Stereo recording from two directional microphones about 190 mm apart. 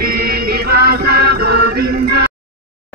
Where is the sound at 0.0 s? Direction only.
55° right (ahead or behind).